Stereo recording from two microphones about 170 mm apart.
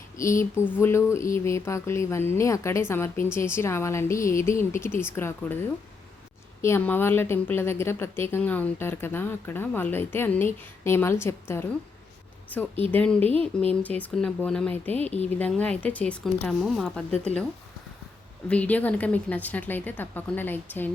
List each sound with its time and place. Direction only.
0.2 s a woman's voice: 15° left (ahead or behind)
6.6 s a woman's voice: 15° left (ahead or behind)
12.9 s a woman's voice: 5° left (ahead or behind)
18.4 s a woman's voice: 5° left (ahead or behind)